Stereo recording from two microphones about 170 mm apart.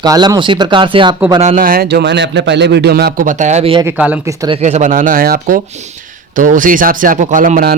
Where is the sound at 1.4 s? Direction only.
50° right (ahead or behind).